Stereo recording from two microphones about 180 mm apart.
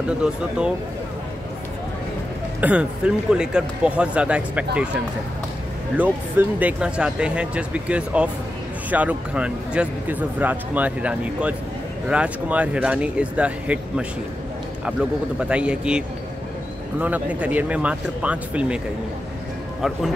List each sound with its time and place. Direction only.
0.2 s a man's voice: 5° right (ahead or behind)
2.6 s a man's voice: 5° right (ahead or behind)
17.0 s speech: 10° right (ahead or behind)